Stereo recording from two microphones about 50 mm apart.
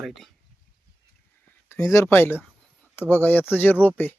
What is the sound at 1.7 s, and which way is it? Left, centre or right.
Speech, left.